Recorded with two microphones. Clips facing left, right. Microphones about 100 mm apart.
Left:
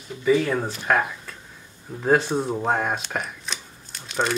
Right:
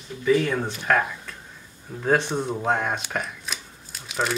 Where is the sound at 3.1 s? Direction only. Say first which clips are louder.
Even; centre (ahead or behind).